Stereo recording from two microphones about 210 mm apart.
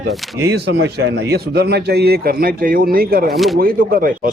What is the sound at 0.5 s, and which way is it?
Speech, 55° right (ahead or behind).